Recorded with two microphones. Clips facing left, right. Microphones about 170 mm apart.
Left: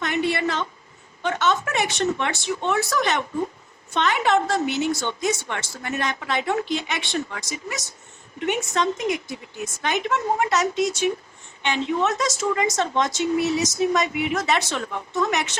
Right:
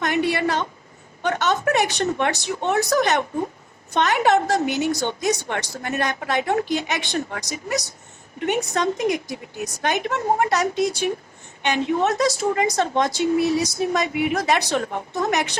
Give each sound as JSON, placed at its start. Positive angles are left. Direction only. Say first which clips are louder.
{"t": 0.0, "sound": "a woman's voice", "louder": "right 2 dB", "side_deg": -45}
{"t": 10.8, "sound": "speech", "louder": "right 1 dB", "side_deg": -10}
{"t": 11.6, "sound": "speech", "louder": "right 2 dB", "side_deg": -45}